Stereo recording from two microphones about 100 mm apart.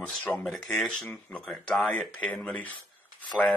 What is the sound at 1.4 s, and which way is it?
Speech, 5° left (ahead or behind).